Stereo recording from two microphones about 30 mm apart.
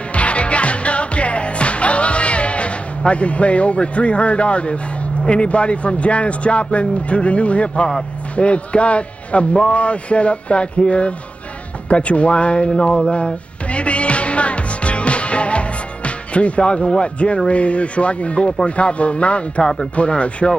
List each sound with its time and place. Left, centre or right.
0.1 s music: left
5.3 s a man's voice: left
13.1 s music: left
17.0 s speech: left